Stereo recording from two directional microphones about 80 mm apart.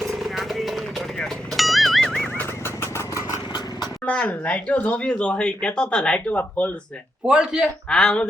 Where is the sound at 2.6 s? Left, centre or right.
Left.